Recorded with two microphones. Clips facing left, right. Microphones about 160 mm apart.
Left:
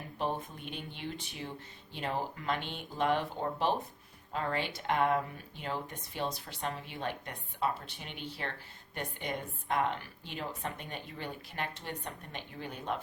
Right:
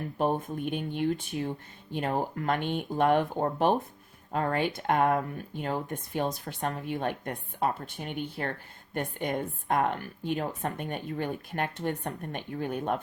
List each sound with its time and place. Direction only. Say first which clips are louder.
0.2 s speech: right 7 dB; 50° right (ahead or behind)